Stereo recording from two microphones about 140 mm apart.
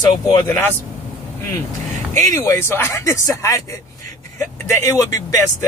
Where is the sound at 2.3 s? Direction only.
20° left (ahead or behind).